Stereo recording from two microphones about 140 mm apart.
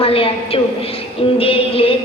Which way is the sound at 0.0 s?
40° left (ahead or behind).